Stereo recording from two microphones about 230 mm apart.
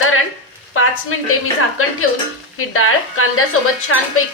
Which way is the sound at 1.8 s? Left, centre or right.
Left.